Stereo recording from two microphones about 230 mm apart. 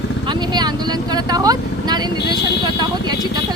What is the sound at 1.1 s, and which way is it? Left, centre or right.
Speech, centre.